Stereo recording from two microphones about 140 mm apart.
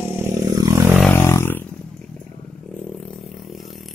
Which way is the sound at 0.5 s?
25° right (ahead or behind).